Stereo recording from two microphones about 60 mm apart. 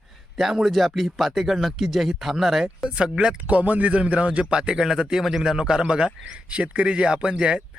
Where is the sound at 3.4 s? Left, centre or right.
Right.